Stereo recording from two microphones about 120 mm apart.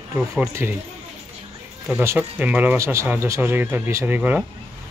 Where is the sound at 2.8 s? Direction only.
25° right (ahead or behind).